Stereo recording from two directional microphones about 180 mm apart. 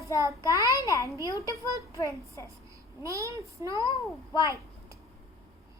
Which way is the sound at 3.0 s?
15° right (ahead or behind).